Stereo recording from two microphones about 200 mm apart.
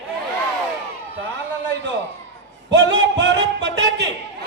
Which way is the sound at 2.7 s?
60° right (ahead or behind).